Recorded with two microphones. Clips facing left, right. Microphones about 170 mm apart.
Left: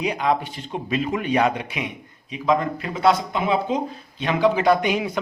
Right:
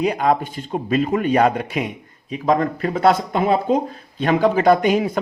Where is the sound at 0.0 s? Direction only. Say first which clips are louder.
Right 4 dB; 45° right (ahead or behind).